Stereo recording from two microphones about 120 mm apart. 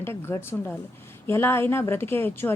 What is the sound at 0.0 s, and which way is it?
A woman's voice, 20° left (ahead or behind).